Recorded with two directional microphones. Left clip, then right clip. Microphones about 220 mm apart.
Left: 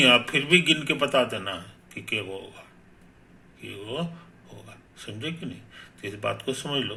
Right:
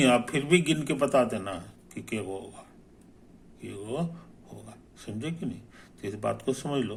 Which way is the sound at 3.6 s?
20° right (ahead or behind).